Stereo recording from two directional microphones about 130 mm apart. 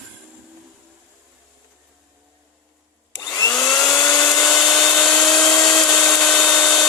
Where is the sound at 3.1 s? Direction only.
25° left (ahead or behind).